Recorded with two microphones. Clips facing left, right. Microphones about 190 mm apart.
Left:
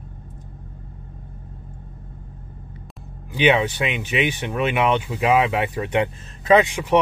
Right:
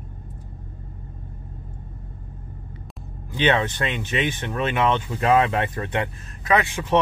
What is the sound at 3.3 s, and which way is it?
Speech, 10° left (ahead or behind).